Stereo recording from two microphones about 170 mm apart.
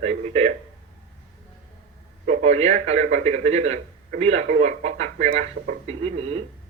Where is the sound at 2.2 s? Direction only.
40° right (ahead or behind).